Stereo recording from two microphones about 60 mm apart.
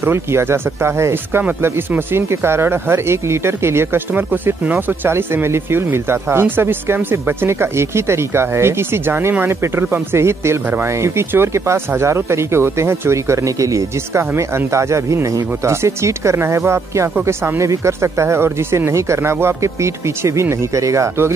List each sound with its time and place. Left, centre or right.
0.0 s speech: right
4.1 s speech: right